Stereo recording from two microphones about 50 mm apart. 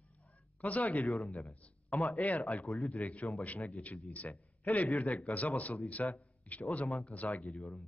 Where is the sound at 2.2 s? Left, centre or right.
Left.